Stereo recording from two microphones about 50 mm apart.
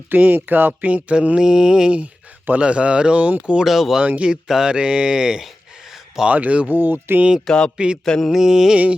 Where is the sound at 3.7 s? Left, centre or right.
Centre.